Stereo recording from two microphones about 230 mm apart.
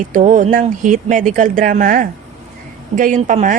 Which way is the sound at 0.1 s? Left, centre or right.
Right.